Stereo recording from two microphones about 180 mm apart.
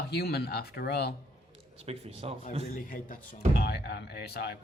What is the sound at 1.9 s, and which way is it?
Speech, 35° right (ahead or behind).